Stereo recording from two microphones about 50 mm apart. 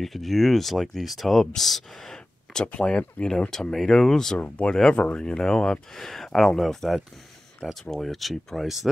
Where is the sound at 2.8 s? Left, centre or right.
Centre.